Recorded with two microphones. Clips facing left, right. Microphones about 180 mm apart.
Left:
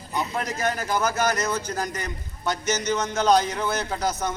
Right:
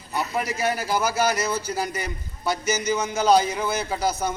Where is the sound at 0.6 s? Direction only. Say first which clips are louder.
Even; 5° right (ahead or behind).